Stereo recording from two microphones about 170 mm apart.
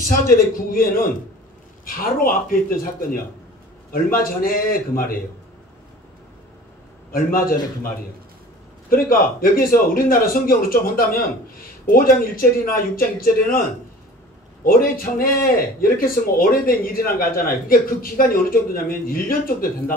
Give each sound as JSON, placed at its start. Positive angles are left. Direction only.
{"t": 0.3, "sound": "speech", "side_deg": 60}
{"t": 7.1, "sound": "speech", "side_deg": 60}
{"t": 8.9, "sound": "speech", "side_deg": 60}
{"t": 14.6, "sound": "speech", "side_deg": 60}